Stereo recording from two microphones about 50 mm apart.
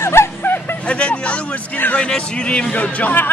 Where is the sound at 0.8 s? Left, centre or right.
Left.